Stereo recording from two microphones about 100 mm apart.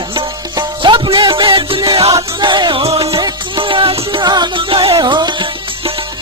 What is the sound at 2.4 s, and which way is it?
Music, 50° right (ahead or behind).